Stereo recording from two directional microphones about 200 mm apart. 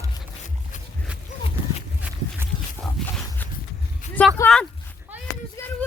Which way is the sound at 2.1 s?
5° right (ahead or behind).